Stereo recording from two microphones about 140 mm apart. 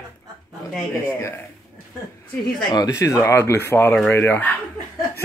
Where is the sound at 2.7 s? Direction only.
25° left (ahead or behind).